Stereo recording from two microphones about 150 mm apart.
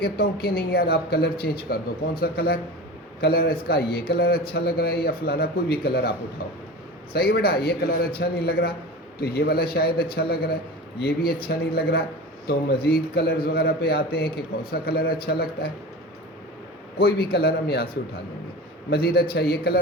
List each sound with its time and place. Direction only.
0.0 s a man's voice: 90° left
17.0 s a man's voice: 90° left